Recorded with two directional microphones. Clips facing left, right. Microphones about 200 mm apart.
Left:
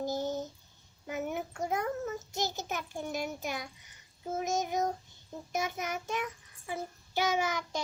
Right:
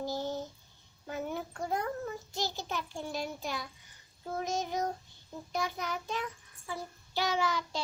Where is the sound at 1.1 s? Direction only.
20° left (ahead or behind).